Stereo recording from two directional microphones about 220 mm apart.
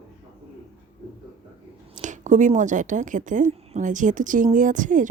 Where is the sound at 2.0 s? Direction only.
35° right (ahead or behind).